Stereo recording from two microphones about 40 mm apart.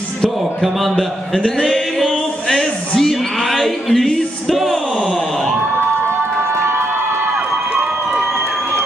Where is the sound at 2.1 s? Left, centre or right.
Centre.